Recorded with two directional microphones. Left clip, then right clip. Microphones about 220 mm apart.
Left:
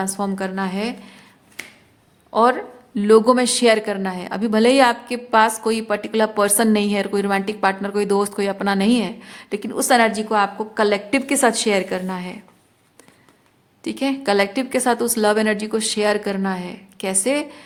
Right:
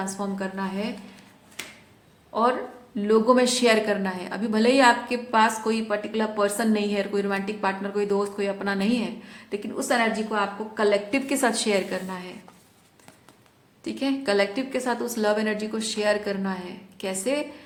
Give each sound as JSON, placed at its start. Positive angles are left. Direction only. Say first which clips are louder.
{"t": 0.0, "sound": "a woman's voice", "louder": "left 6 dB", "side_deg": 35}
{"t": 2.3, "sound": "speech", "louder": "left 7 dB", "side_deg": 45}
{"t": 13.8, "sound": "speech", "louder": "left 5 dB", "side_deg": 35}